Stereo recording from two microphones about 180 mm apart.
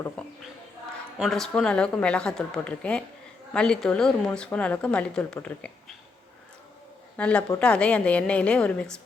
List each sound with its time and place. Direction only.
0.2 s a sound: 5° left (ahead or behind)
1.2 s speech: centre (ahead or behind)
7.2 s a woman's voice: 5° left (ahead or behind)